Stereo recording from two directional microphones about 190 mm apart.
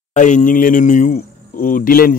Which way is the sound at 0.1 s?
40° left (ahead or behind).